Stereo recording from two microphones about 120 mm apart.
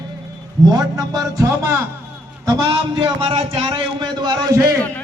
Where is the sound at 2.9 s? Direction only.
45° right (ahead or behind).